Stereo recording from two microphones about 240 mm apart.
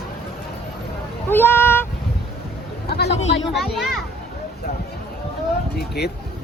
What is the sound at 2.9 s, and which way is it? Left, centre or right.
Speech, left.